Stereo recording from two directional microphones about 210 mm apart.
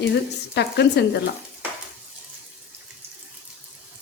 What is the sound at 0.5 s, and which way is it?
Speech, 55° left (ahead or behind).